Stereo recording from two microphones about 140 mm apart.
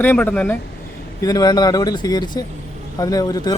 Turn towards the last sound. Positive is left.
turn(degrees=25)  # may be behind; listen again after turning